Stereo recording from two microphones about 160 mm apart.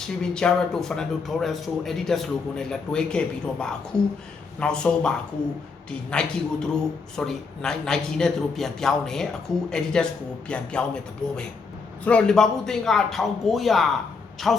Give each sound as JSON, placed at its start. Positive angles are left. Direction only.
{"t": 0.2, "sound": "speech", "side_deg": 5}